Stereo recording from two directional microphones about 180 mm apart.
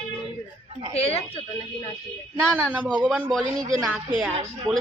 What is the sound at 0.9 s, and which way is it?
Speech, 35° left (ahead or behind).